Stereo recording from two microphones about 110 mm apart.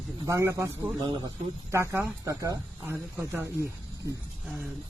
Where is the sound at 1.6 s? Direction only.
25° right (ahead or behind).